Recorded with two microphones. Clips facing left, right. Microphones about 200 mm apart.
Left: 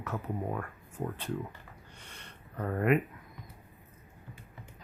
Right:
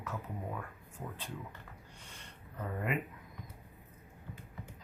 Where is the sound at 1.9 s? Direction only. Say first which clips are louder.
Left 2 dB; 65° left (ahead or behind).